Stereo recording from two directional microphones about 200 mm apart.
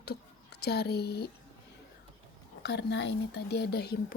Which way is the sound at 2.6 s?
60° left (ahead or behind).